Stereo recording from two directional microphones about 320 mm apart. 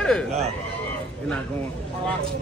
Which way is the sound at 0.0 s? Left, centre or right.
Centre.